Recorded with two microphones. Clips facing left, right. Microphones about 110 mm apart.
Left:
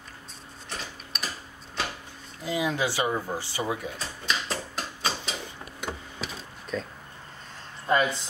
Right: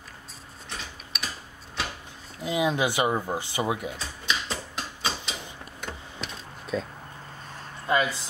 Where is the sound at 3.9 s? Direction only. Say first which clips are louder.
Even; centre (ahead or behind).